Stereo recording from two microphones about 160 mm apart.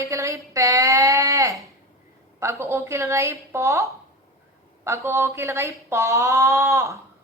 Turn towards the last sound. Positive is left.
turn(degrees=-20)  # may be behind; listen again after turning